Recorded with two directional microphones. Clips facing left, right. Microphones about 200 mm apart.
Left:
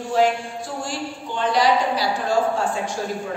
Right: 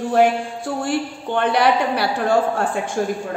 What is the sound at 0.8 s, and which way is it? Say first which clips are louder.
A woman's voice: right 6 dB; 60° right (ahead or behind).